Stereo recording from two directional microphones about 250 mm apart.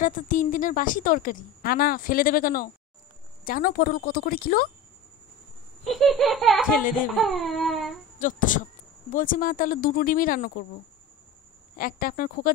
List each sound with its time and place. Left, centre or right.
0.0 s a woman's voice: left
5.9 s a sound: centre
6.7 s a woman's voice: left
7.2 s a sound: centre
8.2 s a woman's voice: left
11.7 s a woman's voice: left